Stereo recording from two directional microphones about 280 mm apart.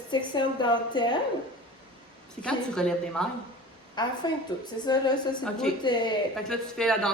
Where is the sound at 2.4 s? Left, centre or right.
Centre.